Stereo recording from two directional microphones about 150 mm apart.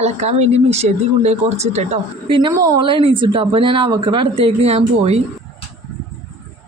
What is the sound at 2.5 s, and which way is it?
Speech, 25° right (ahead or behind).